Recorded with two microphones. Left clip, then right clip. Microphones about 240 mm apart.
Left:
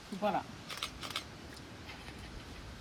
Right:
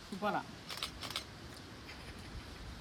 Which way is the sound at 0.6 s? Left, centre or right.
Right.